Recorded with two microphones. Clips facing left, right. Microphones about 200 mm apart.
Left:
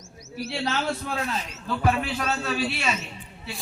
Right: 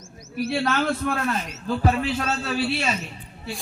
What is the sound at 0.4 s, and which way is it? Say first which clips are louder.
Speech: right 4 dB; 55° right (ahead or behind).